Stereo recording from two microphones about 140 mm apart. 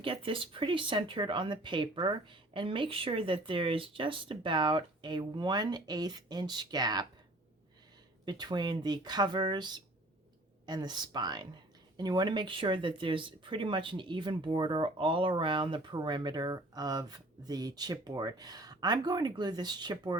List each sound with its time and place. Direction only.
0.0 s speech: 40° right (ahead or behind)
8.2 s speech: 30° right (ahead or behind)